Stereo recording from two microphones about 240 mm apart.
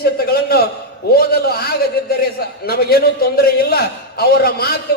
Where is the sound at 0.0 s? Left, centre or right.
Left.